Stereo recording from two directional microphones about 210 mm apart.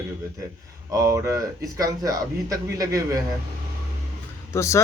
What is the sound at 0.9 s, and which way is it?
Speech, 15° right (ahead or behind).